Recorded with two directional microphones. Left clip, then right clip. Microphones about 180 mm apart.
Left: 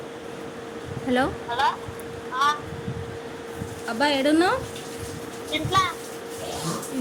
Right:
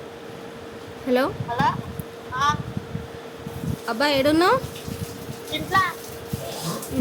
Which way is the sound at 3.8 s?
35° right (ahead or behind).